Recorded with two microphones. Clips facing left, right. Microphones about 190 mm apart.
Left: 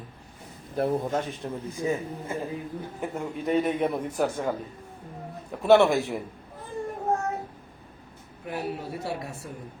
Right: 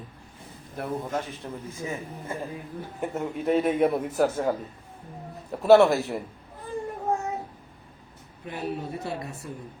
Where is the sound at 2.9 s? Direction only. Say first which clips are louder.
Right 4 dB; centre (ahead or behind).